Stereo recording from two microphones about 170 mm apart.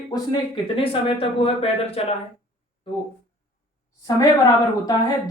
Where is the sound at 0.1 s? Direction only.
30° left (ahead or behind).